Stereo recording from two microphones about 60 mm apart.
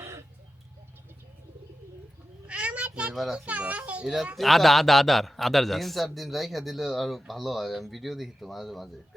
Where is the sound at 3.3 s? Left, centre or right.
Right.